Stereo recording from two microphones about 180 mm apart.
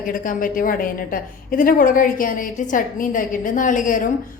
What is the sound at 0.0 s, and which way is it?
A woman's voice, 50° left (ahead or behind).